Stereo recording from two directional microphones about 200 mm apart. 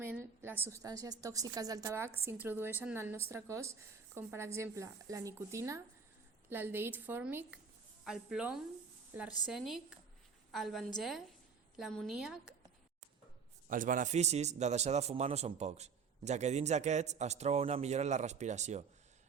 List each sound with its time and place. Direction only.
0.0 s a woman's voice: 10° right (ahead or behind)
13.7 s a man's voice: 40° right (ahead or behind)